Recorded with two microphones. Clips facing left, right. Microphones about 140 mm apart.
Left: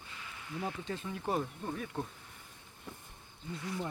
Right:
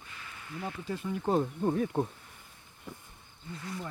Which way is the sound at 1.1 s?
25° right (ahead or behind).